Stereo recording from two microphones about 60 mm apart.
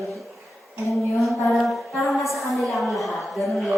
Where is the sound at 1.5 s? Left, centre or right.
Centre.